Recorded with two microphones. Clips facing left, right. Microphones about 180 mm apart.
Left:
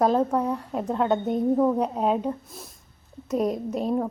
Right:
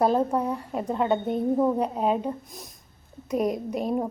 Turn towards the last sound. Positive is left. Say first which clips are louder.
# left 1 dB
turn(degrees=-10)  # may be behind; listen again after turning